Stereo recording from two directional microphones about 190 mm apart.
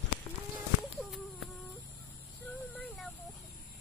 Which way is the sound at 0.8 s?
Centre (ahead or behind).